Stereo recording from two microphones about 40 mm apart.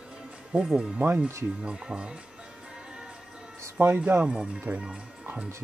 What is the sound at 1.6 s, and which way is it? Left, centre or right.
Speech, right.